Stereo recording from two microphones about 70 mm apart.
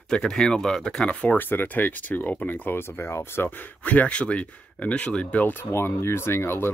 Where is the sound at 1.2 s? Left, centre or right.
Left.